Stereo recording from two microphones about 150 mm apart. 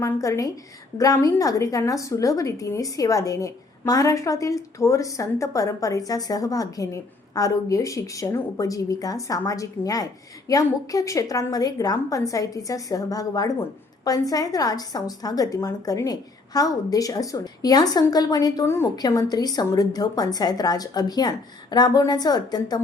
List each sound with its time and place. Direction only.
0.0 s a woman's voice: 20° left (ahead or behind)